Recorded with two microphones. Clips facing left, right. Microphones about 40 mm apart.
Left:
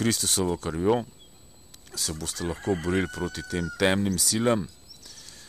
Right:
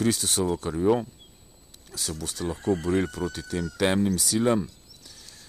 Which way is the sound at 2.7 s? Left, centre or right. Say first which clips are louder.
Right 2 dB; left.